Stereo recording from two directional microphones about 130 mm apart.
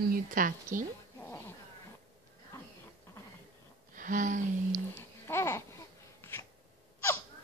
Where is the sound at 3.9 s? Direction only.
85° right.